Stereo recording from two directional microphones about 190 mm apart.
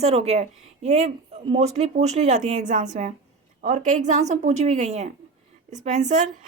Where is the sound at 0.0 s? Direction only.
35° right (ahead or behind).